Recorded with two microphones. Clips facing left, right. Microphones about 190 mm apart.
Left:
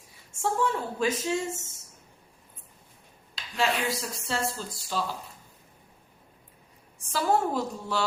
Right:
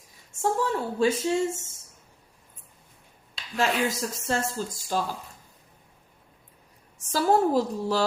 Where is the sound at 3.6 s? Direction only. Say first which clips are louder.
Right 2 dB; 45° right (ahead or behind).